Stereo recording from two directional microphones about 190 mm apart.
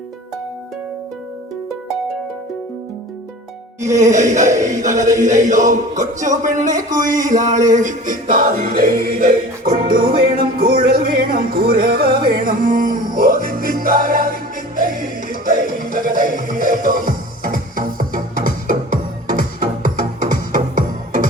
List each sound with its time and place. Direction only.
3.9 s music: 40° right (ahead or behind)